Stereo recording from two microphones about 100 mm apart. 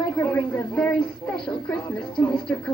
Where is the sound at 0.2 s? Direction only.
15° left (ahead or behind).